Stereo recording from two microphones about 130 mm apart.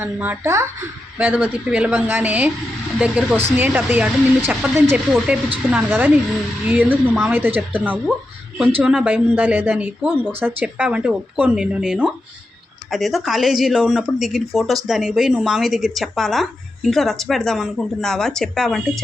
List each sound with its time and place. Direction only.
0.0 s a woman's voice: 15° right (ahead or behind); by 19.0 s 5° left (ahead or behind)